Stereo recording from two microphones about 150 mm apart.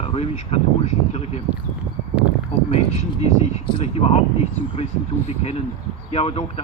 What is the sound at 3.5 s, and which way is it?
Speech, 45° left (ahead or behind).